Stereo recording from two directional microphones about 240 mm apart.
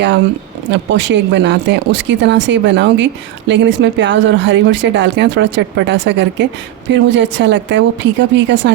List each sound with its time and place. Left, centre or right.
0.7 s speech: right